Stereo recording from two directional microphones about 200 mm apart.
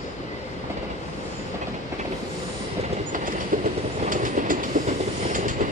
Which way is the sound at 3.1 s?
40° right (ahead or behind).